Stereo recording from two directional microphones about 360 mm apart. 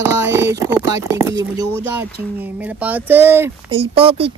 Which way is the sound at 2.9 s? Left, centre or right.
Centre.